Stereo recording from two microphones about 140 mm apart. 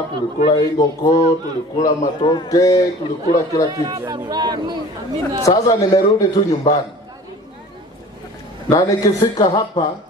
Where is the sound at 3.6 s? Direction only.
30° right (ahead or behind).